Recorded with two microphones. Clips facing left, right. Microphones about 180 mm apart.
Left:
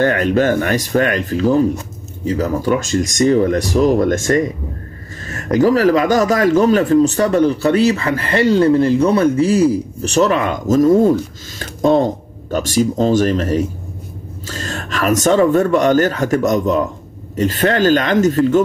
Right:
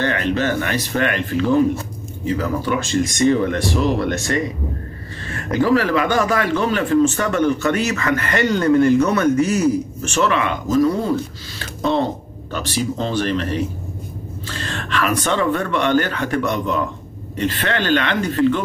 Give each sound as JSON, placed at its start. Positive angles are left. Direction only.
{"t": 0.0, "sound": "a man's voice", "side_deg": 45}